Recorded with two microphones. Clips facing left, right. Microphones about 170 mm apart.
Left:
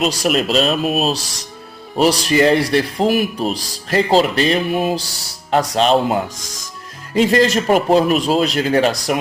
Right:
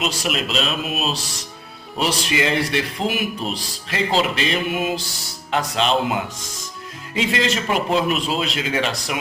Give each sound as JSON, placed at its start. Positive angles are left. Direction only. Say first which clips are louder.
{"t": 0.0, "sound": "a man's voice", "louder": "left 7 dB", "side_deg": 40}